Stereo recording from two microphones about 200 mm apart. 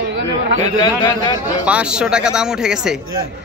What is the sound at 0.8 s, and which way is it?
Speech, 20° left (ahead or behind).